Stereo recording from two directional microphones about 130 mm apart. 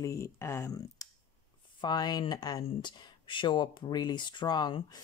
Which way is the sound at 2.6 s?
40° left (ahead or behind).